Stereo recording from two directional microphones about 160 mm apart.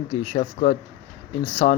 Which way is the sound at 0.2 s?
40° left (ahead or behind).